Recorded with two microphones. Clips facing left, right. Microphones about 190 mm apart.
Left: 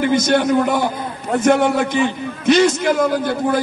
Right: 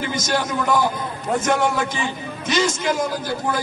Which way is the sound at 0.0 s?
60° left (ahead or behind).